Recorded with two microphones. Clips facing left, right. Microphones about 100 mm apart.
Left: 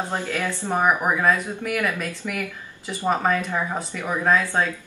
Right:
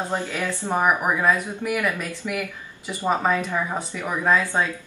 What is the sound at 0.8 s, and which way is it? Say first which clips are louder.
Speech: left 1 dB; 5° right (ahead or behind).